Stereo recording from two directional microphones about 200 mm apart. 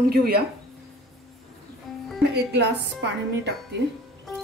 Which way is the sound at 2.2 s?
55° right (ahead or behind).